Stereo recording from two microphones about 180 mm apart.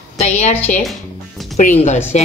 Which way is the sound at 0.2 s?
40° left (ahead or behind).